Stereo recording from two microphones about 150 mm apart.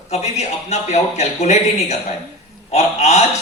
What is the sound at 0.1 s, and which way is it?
A man's voice, 50° left (ahead or behind).